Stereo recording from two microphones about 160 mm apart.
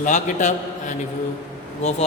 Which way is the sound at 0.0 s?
50° left (ahead or behind).